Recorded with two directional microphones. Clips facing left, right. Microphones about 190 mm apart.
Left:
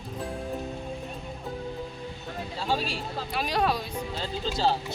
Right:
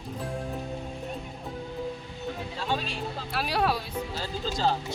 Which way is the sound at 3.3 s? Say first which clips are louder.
Left 1 dB; 5° right (ahead or behind).